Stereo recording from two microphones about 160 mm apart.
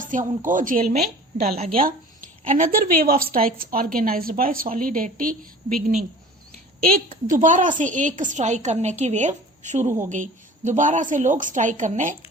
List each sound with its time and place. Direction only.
0.0 s a woman's voice: 55° right (ahead or behind)
1.5 s speech: 40° right (ahead or behind)
2.2 s a woman's voice: 60° right (ahead or behind)
6.7 s a woman's voice: 65° right (ahead or behind)
7.3 s a woman's voice: 55° right (ahead or behind)